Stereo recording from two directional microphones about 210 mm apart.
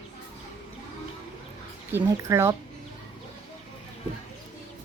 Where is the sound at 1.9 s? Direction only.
15° right (ahead or behind).